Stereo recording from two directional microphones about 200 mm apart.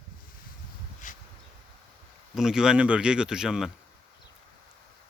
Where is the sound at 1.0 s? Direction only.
40° left (ahead or behind).